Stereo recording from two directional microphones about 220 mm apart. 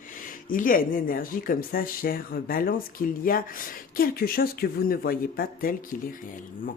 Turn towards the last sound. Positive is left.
turn(degrees=40)  # may be behind; listen again after turning